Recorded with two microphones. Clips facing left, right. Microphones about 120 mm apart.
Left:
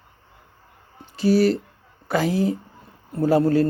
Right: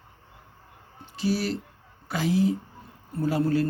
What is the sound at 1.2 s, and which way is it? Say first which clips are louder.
Speech: left 9 dB; 50° left (ahead or behind).